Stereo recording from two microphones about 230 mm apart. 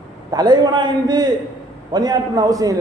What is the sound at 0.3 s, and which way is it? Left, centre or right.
A man's voice, centre.